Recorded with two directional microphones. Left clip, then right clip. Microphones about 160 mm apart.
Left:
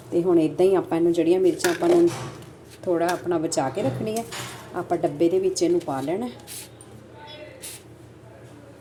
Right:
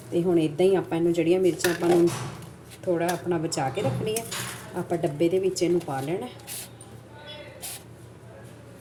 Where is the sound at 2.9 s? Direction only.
20° left (ahead or behind).